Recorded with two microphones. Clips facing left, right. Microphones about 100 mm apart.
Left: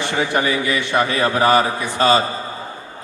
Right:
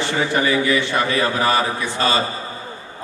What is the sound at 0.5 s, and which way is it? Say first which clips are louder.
Speech: right 2 dB; 30° right (ahead or behind).